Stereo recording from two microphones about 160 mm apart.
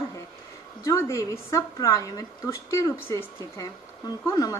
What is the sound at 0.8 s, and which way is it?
A woman's voice, 20° left (ahead or behind).